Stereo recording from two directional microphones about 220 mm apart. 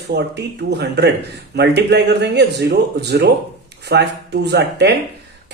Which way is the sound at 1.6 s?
50° right (ahead or behind).